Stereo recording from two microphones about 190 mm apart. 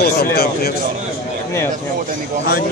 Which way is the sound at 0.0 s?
55° left (ahead or behind).